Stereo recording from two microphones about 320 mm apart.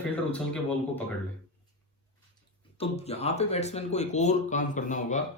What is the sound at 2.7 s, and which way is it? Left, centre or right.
Speech, centre.